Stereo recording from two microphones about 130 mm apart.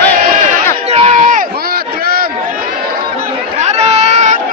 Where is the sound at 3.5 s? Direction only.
60° right (ahead or behind).